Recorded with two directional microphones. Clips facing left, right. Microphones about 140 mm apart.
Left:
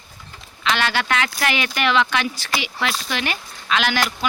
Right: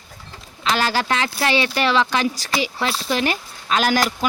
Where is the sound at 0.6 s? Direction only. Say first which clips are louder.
Right 1 dB; 35° right (ahead or behind).